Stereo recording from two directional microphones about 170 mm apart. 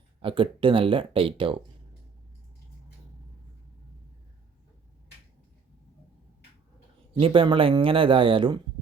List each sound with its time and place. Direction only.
0.2 s a man's voice: 30° right (ahead or behind)
7.1 s a man's voice: 35° right (ahead or behind)